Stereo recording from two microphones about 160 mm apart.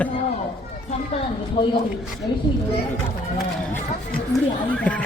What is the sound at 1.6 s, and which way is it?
Speech, 30° left (ahead or behind).